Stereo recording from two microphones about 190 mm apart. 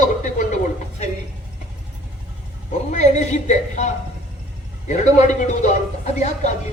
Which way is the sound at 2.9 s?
40° left (ahead or behind).